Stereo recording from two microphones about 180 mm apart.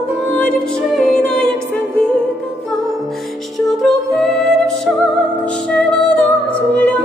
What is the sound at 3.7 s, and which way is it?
Music, centre (ahead or behind).